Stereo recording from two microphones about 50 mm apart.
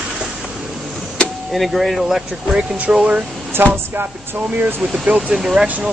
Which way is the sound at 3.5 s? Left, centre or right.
Right.